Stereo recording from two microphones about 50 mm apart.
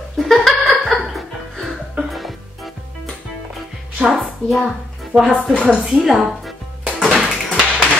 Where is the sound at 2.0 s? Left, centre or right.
Centre.